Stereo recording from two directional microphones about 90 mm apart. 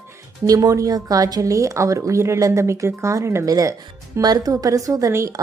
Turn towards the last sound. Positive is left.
turn(degrees=-35)  # may be behind; listen again after turning